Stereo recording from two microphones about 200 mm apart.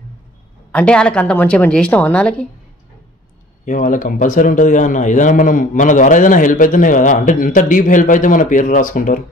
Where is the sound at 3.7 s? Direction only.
40° left (ahead or behind).